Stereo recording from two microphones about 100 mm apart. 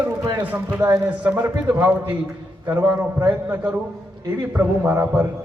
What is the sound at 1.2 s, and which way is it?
A man's voice, 15° right (ahead or behind).